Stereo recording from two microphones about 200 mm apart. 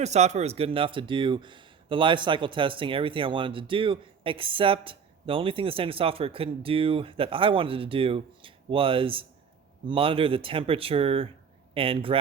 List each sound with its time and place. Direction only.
0.0 s speech: 35° right (ahead or behind)